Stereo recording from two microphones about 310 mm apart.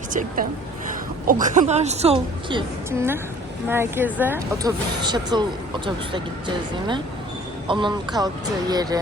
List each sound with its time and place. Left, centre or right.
0.1 s a woman's voice: right
7.7 s speech: centre